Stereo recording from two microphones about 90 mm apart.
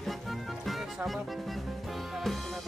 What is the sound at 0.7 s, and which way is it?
Music, centre (ahead or behind).